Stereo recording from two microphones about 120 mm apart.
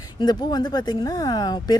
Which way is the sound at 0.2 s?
35° left (ahead or behind).